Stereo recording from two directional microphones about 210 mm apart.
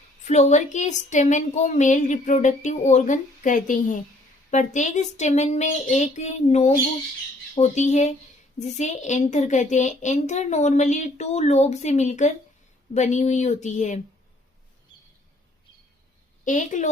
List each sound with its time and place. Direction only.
0.3 s a woman's voice: 35° left (ahead or behind)
16.4 s a woman's voice: 35° left (ahead or behind)